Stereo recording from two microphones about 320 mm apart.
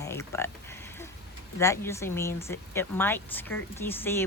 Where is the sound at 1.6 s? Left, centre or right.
Centre.